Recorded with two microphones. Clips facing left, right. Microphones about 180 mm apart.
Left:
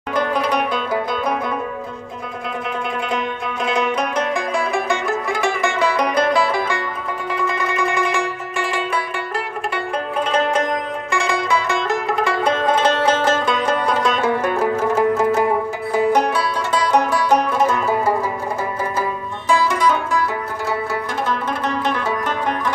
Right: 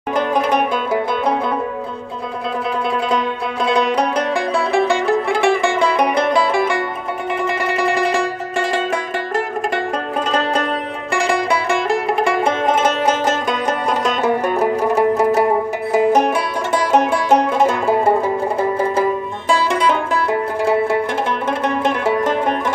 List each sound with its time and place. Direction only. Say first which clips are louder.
0.1 s music: right 3 dB; 20° right (ahead or behind)
3.6 s music: right 4 dB; 35° right (ahead or behind)
11.1 s music: right 4 dB; 35° right (ahead or behind)
14.5 s music: right 2 dB; 15° right (ahead or behind)
21.6 s music: right 4 dB; 25° right (ahead or behind)